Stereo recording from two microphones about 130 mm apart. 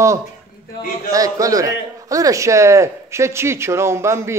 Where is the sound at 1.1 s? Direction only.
25° right (ahead or behind).